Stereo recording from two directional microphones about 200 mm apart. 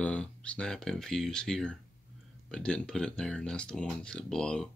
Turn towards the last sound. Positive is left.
turn(degrees=5)  # may be behind; listen again after turning